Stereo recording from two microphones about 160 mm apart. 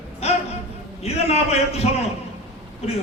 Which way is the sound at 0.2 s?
40° left (ahead or behind).